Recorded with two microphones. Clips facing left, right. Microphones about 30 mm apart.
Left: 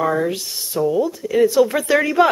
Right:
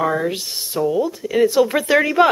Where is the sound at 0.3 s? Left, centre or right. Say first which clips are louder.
Even; centre.